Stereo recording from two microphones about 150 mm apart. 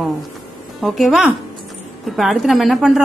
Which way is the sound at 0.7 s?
Centre (ahead or behind).